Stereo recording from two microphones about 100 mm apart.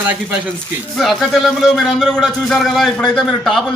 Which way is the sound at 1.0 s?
Centre (ahead or behind).